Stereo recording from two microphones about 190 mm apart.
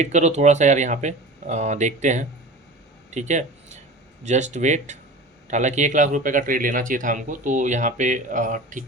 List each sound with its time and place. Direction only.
0.0 s speech: 35° right (ahead or behind)